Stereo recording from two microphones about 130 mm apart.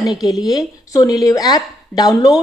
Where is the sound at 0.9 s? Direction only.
25° left (ahead or behind).